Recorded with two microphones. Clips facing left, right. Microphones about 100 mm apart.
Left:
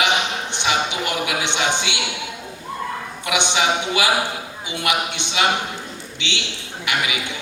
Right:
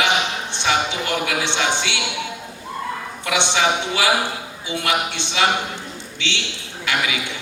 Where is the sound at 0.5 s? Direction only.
20° left (ahead or behind).